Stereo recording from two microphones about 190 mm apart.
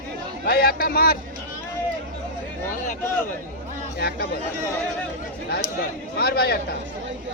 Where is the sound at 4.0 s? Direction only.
55° left (ahead or behind).